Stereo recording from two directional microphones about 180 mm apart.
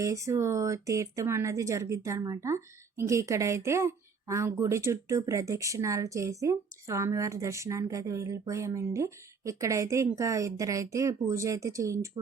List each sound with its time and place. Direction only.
0.0 s speech: 15° right (ahead or behind)